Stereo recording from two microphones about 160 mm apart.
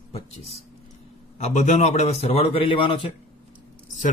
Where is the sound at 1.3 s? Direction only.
45° left (ahead or behind).